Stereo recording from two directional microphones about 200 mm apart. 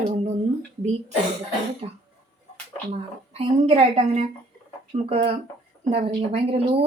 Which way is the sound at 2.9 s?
30° right (ahead or behind).